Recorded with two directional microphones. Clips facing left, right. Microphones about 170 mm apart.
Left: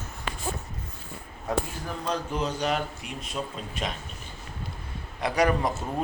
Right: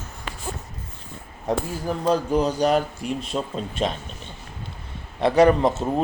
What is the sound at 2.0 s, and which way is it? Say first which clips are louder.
Speech: right 9 dB; 35° right (ahead or behind).